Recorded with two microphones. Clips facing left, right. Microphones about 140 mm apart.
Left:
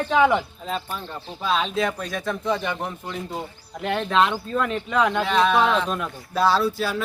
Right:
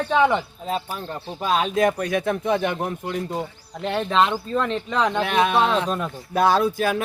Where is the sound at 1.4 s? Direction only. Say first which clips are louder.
Right 3 dB; 45° right (ahead or behind).